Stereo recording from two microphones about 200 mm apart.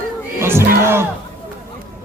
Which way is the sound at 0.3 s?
10° right (ahead or behind).